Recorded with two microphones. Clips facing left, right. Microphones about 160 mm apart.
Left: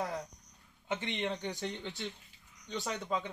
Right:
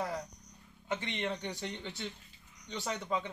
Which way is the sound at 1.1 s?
Centre (ahead or behind).